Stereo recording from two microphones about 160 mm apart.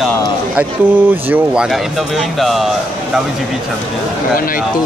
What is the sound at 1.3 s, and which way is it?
Speech, 5° right (ahead or behind).